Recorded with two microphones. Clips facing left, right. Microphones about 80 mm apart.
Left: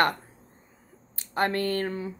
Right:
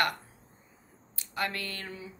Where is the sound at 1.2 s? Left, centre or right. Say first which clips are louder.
Left 8 dB; left.